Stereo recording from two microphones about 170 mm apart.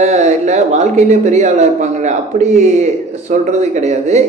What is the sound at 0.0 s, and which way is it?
Speech, 45° right (ahead or behind).